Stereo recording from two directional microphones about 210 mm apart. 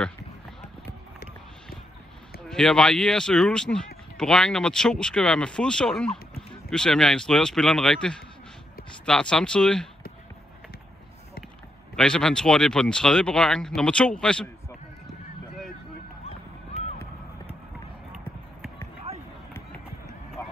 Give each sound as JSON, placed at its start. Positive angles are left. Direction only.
{"t": 2.4, "sound": "speech", "side_deg": 5}
{"t": 11.9, "sound": "speech", "side_deg": 5}
{"t": 19.1, "sound": "run", "side_deg": -30}